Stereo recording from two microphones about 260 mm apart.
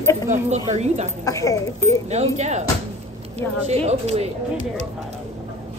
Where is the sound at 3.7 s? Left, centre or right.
Right.